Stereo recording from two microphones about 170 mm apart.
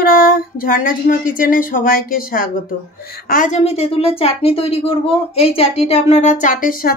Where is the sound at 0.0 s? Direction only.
55° left (ahead or behind).